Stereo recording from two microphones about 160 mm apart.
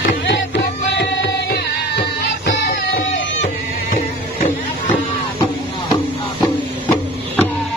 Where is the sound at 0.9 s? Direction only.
90° left.